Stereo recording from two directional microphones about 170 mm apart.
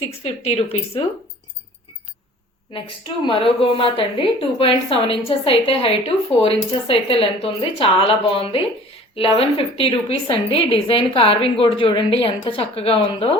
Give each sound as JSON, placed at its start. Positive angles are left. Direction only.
{"t": 0.2, "sound": "a woman's voice", "side_deg": 35}
{"t": 2.7, "sound": "a woman's voice", "side_deg": 30}